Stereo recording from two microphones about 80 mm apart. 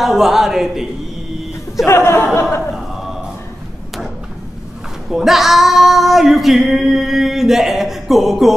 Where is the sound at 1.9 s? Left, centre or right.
Left.